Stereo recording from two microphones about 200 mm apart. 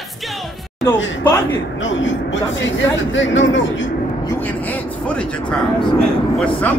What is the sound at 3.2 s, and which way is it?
Speech, 70° left (ahead or behind).